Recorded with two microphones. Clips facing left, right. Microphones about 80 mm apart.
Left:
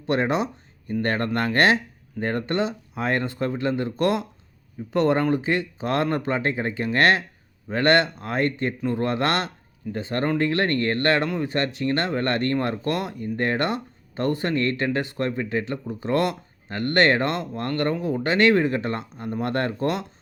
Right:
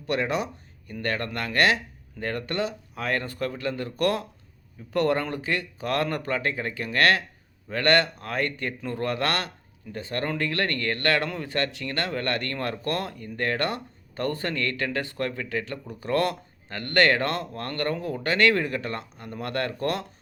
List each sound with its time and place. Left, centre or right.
0.1 s speech: left